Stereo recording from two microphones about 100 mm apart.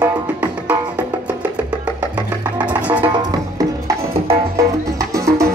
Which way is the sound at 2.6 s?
15° right (ahead or behind).